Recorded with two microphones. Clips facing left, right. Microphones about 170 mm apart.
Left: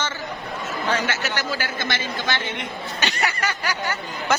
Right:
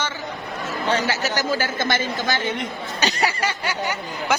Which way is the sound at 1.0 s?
40° right (ahead or behind).